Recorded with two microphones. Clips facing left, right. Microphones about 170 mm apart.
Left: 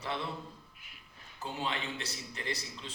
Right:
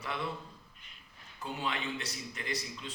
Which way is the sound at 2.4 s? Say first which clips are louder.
Left 3 dB; 30° left (ahead or behind).